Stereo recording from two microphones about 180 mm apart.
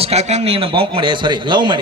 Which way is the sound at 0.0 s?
35° right (ahead or behind).